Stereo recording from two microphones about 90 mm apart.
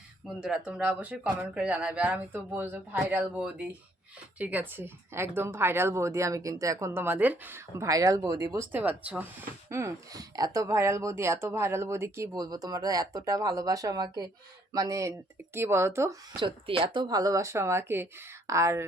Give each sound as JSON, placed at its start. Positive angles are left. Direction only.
{"t": 0.3, "sound": "speech", "side_deg": -10}
{"t": 7.9, "sound": "speech", "side_deg": -40}
{"t": 8.5, "sound": "speech", "side_deg": -20}
{"t": 9.6, "sound": "speech", "side_deg": -30}
{"t": 10.1, "sound": "speech", "side_deg": -45}
{"t": 12.4, "sound": "speech", "side_deg": -45}
{"t": 16.4, "sound": "speech", "side_deg": -90}
{"t": 17.1, "sound": "speech", "side_deg": -45}